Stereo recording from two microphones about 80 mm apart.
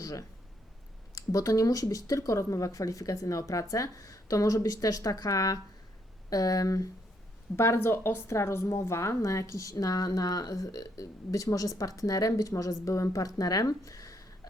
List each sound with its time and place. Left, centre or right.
0.0 s a woman's voice: left
7.5 s a woman's voice: left